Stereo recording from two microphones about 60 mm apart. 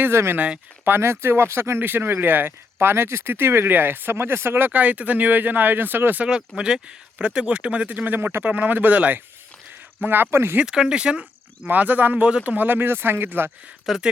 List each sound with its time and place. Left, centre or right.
0.0 s speech: right
6.5 s speech: centre
6.8 s speech: centre; by 10.6 s right
10.7 s speech: centre
11.6 s speech: right
13.9 s speech: centre